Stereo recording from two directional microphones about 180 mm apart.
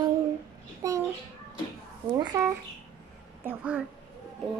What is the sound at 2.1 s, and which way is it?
A woman's voice, 20° right (ahead or behind).